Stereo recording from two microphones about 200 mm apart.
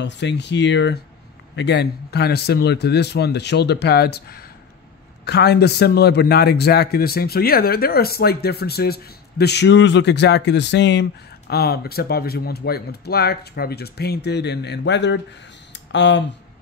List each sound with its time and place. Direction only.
0.0 s a man's voice: 60° left (ahead or behind)